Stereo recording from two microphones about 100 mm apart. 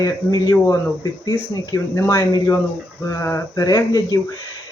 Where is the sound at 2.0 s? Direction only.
25° left (ahead or behind).